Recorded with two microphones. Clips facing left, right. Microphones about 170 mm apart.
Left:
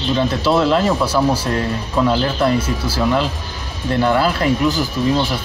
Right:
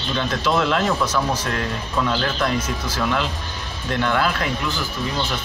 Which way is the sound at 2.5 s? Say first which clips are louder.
Left 5 dB; 10° left (ahead or behind).